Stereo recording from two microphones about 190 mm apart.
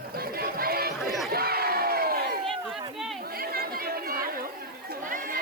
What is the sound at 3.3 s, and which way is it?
Chatter, 55° right (ahead or behind).